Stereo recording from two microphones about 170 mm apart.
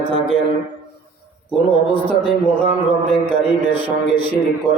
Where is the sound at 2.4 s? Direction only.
10° left (ahead or behind).